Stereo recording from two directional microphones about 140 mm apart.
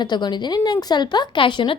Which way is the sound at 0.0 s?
30° left (ahead or behind).